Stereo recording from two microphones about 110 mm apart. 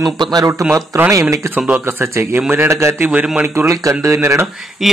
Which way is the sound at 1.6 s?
5° right (ahead or behind).